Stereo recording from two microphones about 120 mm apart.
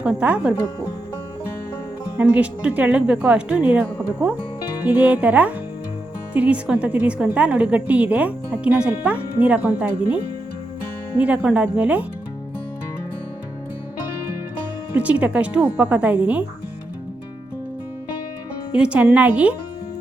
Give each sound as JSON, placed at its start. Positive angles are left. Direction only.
{"t": 0.0, "sound": "a woman's voice", "side_deg": -10}
{"t": 2.1, "sound": "a woman's voice", "side_deg": -10}
{"t": 4.9, "sound": "a woman's voice", "side_deg": -15}
{"t": 11.2, "sound": "a woman's voice", "side_deg": -10}
{"t": 14.9, "sound": "a woman's voice", "side_deg": -10}
{"t": 18.7, "sound": "a woman's voice", "side_deg": -10}